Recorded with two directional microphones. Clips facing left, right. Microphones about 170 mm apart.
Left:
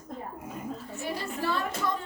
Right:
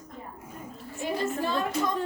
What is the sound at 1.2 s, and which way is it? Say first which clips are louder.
Speech: right 3 dB; 20° right (ahead or behind).